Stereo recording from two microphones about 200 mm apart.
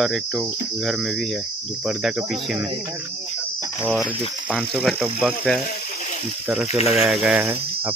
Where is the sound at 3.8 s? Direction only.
5° right (ahead or behind).